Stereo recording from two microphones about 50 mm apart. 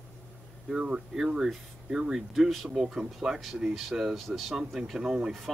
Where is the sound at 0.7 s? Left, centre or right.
Centre.